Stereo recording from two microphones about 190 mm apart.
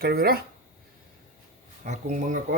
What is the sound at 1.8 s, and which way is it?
Speech, 40° right (ahead or behind).